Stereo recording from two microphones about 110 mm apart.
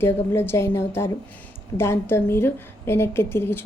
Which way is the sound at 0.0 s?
20° left (ahead or behind).